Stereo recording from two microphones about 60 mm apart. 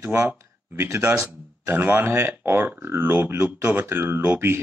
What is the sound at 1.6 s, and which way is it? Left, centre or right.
Speech, right.